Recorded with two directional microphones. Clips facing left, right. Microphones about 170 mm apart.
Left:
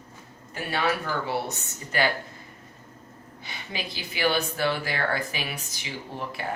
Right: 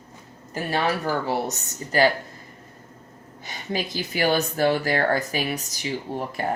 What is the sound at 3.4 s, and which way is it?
Speech, 45° right (ahead or behind).